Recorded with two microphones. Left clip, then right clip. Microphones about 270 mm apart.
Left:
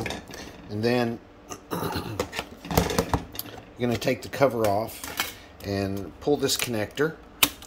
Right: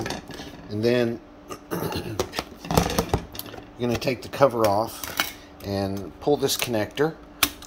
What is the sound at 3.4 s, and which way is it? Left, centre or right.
Keys jangling, centre.